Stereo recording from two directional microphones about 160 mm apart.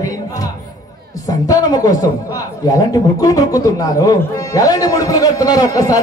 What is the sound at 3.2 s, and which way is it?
A man's voice, 20° left (ahead or behind).